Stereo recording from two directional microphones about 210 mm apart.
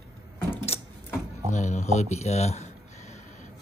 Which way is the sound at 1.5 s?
35° left (ahead or behind).